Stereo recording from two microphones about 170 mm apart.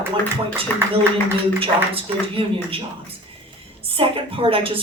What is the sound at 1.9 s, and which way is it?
A woman's voice, 35° right (ahead or behind).